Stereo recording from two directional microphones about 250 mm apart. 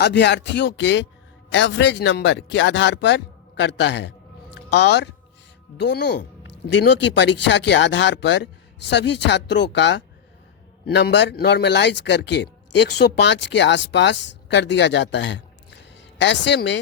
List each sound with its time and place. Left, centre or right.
0.0 s speech: left